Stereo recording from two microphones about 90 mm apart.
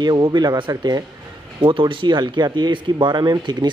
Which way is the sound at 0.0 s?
55° right (ahead or behind).